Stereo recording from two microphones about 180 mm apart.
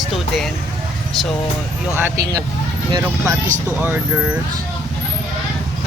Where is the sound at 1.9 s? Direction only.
15° right (ahead or behind).